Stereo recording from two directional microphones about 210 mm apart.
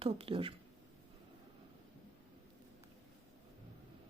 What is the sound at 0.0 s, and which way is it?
Speech, 25° right (ahead or behind).